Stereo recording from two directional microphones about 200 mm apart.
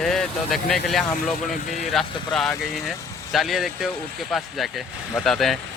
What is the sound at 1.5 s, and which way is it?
Speech, 40° left (ahead or behind).